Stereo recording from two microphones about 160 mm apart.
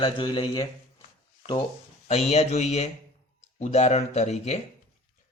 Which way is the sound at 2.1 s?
40° left (ahead or behind).